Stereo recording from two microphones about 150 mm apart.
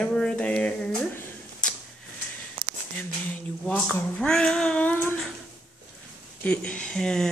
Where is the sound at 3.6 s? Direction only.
10° left (ahead or behind).